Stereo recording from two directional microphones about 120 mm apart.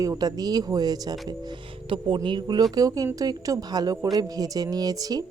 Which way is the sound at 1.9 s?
45° right (ahead or behind).